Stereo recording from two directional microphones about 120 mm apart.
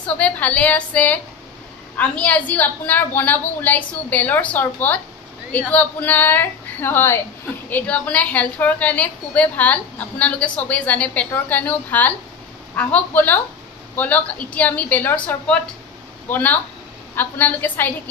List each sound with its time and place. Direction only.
0.0 s a woman's voice: 10° left (ahead or behind)